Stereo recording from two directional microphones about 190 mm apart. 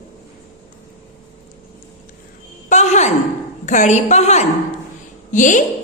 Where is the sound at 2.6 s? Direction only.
40° left (ahead or behind).